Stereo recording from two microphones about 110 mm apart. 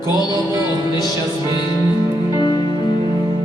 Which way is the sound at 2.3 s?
45° left (ahead or behind).